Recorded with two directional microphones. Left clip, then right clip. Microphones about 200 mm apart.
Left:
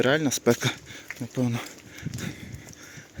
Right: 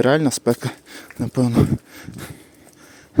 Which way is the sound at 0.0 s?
30° right (ahead or behind).